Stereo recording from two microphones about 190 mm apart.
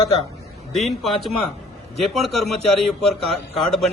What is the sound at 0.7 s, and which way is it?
A man's voice, centre (ahead or behind).